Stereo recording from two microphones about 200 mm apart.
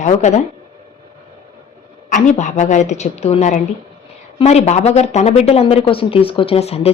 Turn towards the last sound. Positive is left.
turn(degrees=30)  # may be behind; listen again after turning